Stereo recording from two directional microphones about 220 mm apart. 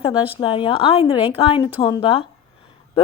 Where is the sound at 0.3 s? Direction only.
20° left (ahead or behind).